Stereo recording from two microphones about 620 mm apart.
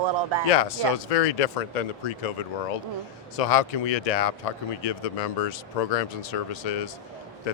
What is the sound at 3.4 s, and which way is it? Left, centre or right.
Speech, left.